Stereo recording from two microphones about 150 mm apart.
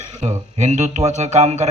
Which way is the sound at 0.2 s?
50° right (ahead or behind).